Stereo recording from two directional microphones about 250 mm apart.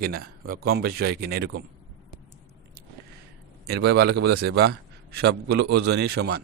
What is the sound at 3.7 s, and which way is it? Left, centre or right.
A man's voice, right.